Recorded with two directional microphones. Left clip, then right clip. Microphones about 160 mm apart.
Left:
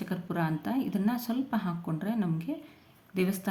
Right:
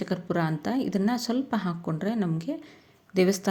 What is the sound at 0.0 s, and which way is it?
A woman's voice, 35° right (ahead or behind).